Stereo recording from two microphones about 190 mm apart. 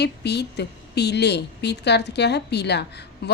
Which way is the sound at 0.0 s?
60° left (ahead or behind).